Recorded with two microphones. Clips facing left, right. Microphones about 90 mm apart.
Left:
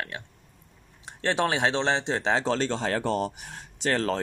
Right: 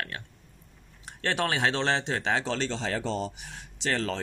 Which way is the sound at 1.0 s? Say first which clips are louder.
Left 3 dB; 25° left (ahead or behind).